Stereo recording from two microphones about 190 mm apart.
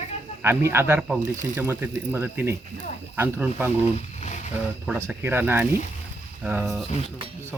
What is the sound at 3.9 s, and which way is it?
Speech, 35° left (ahead or behind).